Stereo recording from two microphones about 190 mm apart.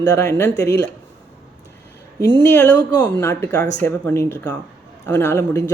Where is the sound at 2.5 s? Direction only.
10° left (ahead or behind).